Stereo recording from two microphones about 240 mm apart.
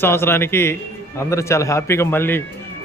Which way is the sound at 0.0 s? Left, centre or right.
Centre.